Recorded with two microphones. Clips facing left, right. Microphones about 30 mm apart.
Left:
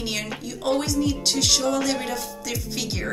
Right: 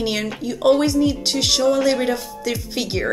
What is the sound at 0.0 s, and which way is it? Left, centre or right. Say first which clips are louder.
A woman's voice: right 6 dB; centre.